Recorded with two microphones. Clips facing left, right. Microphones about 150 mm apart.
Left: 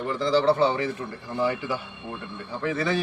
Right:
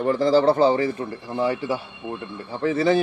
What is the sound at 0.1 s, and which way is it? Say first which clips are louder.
A man's voice: right 4 dB; 45° right (ahead or behind).